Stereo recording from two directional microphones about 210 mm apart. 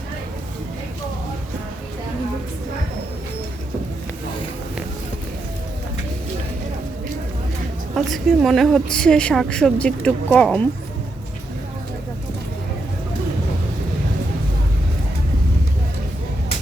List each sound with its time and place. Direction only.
7.9 s a woman's voice: centre (ahead or behind)